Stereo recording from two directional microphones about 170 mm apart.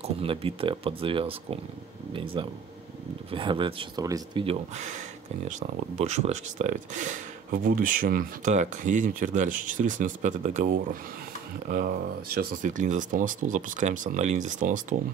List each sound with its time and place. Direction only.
0.0 s speech: 35° right (ahead or behind)
4.7 s speech: 45° right (ahead or behind)